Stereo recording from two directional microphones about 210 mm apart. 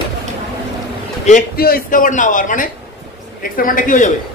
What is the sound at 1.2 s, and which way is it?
A man's voice, 40° left (ahead or behind).